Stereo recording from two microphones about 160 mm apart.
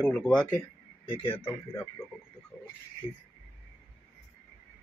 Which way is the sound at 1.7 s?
15° left (ahead or behind).